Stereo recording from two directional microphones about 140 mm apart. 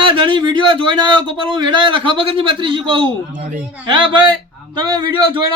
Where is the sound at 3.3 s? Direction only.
65° right (ahead or behind).